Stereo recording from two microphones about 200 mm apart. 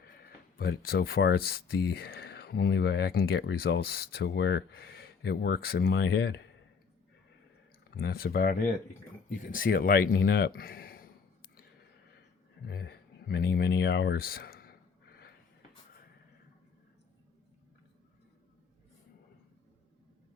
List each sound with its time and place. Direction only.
0.6 s speech: 50° left (ahead or behind)
7.9 s speech: 50° left (ahead or behind)
12.6 s a sound: 50° left (ahead or behind)